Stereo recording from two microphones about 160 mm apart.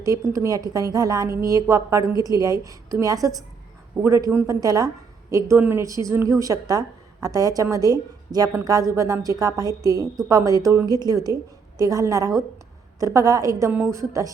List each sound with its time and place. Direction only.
0.0 s a woman's voice: 20° right (ahead or behind)